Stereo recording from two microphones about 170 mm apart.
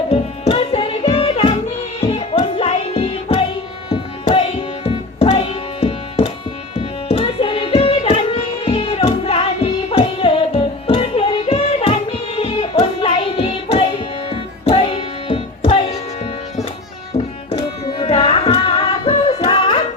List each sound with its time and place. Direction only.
0.1 s music: 35° left (ahead or behind)
6.7 s carnatic music: 35° left (ahead or behind)
17.1 s music: 35° left (ahead or behind)
17.5 s tabla: 35° left (ahead or behind)
19.0 s music: 35° left (ahead or behind)